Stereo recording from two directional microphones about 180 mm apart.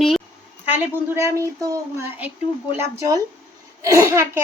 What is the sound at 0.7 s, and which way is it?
A woman's voice, 10° right (ahead or behind).